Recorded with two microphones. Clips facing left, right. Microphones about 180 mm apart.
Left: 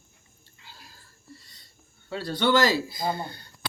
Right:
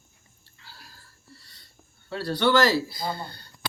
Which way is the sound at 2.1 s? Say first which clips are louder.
Right 1 dB; 20° left (ahead or behind).